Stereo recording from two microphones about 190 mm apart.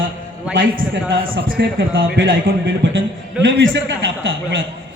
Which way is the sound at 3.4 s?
75° right (ahead or behind).